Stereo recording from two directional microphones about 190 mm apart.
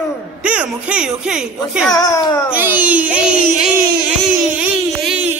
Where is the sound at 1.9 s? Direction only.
20° left (ahead or behind).